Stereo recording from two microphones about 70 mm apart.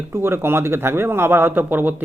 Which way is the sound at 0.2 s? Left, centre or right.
Right.